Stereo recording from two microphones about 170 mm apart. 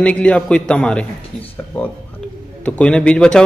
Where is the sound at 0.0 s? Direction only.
5° left (ahead or behind).